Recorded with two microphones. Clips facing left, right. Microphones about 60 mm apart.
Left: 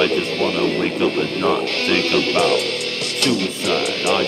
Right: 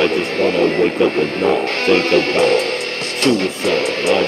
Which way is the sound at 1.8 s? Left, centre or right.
Right.